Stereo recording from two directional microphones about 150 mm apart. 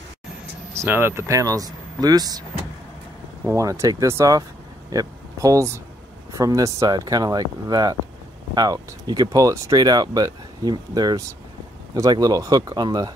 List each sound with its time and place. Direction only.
0.7 s speech: 15° right (ahead or behind)
3.4 s speech: 20° right (ahead or behind)